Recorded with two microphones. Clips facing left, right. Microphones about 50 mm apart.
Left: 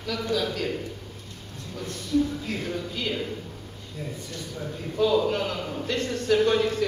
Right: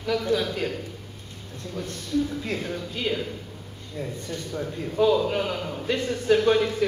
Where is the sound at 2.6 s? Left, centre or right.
Centre.